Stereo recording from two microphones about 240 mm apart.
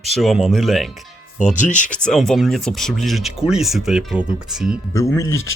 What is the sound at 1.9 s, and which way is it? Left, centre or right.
Speech, centre.